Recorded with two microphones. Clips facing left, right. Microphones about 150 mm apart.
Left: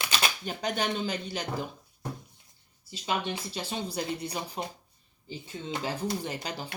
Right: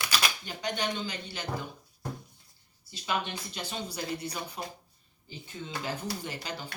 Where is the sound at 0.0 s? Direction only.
25° left (ahead or behind).